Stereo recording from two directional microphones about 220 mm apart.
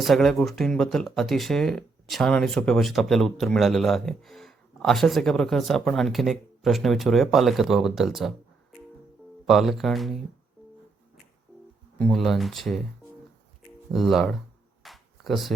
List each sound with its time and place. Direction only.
0.0 s speech: centre (ahead or behind)
9.5 s speech: centre (ahead or behind)
11.9 s speech: centre (ahead or behind)
13.9 s speech: centre (ahead or behind)
14.8 s a sound: centre (ahead or behind)